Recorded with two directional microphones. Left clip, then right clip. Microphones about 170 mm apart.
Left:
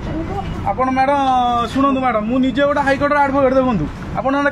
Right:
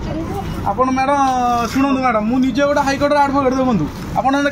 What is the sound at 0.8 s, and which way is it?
A man's voice, 30° left (ahead or behind).